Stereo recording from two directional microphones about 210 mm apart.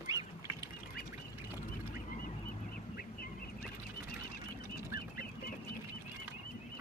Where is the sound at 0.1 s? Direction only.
15° right (ahead or behind).